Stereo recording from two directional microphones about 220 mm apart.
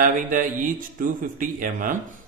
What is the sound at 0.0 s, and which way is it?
A man's voice, 40° right (ahead or behind).